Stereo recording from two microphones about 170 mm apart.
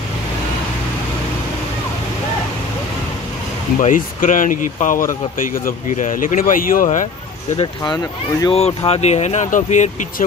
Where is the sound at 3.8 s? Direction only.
50° left (ahead or behind).